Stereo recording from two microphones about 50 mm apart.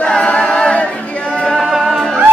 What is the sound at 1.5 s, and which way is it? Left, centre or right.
Music, centre.